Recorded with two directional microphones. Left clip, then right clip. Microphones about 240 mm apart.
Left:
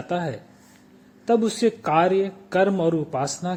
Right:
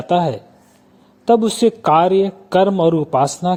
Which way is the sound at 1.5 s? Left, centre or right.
Right.